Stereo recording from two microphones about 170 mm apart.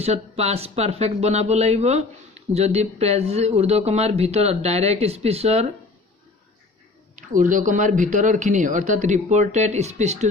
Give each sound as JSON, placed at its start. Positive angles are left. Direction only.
{"t": 0.0, "sound": "speech", "side_deg": -40}
{"t": 7.2, "sound": "speech", "side_deg": -50}